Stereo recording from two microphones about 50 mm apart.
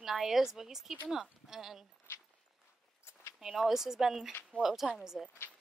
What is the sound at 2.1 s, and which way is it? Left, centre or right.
Walk, left.